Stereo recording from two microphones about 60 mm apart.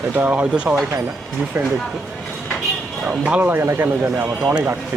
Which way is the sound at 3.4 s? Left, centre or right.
Right.